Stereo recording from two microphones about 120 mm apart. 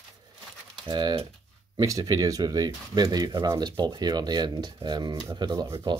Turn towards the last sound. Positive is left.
turn(degrees=-35)  # may be behind; listen again after turning